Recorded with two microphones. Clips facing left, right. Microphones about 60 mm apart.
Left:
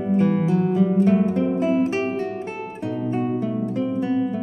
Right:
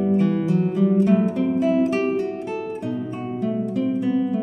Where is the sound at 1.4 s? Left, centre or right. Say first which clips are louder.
Right 1 dB; left.